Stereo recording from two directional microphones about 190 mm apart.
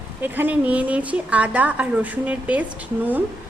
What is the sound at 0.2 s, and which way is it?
A woman's voice, 10° right (ahead or behind).